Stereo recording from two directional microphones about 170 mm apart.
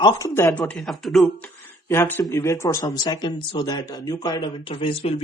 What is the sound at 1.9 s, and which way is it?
Speech, 15° left (ahead or behind).